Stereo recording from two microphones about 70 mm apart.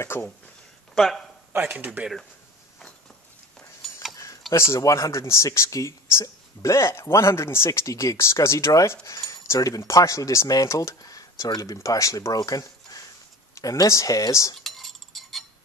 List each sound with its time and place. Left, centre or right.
0.0 s speech: left
0.9 s a man's voice: centre
1.6 s speech: right
3.8 s a sound: centre
4.6 s speech: left
12.4 s a sound: left
13.6 s speech: left
14.6 s cutlery: centre